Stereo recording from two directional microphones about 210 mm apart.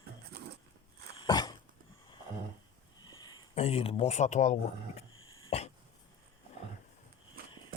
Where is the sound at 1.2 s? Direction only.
20° left (ahead or behind).